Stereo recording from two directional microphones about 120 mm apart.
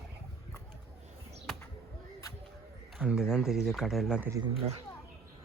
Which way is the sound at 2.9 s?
5° right (ahead or behind).